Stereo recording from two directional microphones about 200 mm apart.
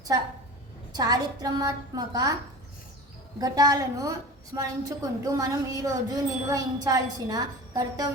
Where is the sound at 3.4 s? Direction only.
20° right (ahead or behind).